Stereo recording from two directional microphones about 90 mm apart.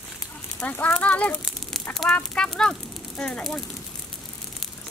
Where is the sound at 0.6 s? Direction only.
20° left (ahead or behind).